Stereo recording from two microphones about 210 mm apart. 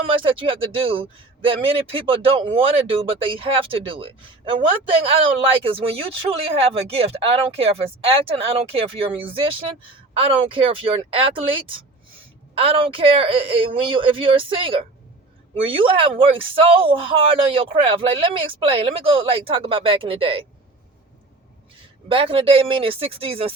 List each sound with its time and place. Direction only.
0.1 s speech: 25° right (ahead or behind)
22.1 s speech: 25° right (ahead or behind)